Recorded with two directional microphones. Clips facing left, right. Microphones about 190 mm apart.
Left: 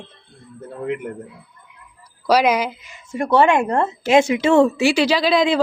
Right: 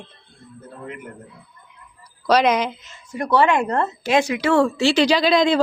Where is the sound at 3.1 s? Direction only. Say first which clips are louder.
Left 2 dB; 25° left (ahead or behind); by 5.6 s 5° left (ahead or behind).